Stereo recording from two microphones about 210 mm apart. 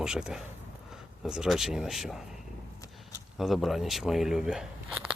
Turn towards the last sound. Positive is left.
turn(degrees=-5)  # may be behind; listen again after turning